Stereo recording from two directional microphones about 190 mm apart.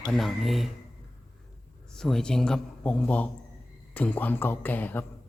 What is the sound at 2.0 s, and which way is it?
A man's voice, 5° left (ahead or behind).